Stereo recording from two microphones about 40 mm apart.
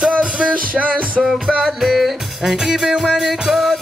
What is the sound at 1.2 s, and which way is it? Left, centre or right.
Music, centre.